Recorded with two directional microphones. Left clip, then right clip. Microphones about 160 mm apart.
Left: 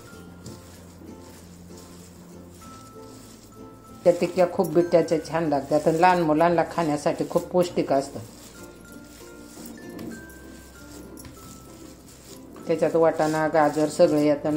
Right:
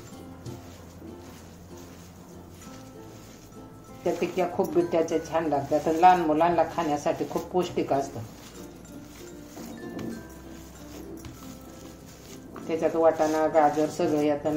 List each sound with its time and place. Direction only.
4.0 s speech: 55° left (ahead or behind)
12.6 s speech: 60° left (ahead or behind)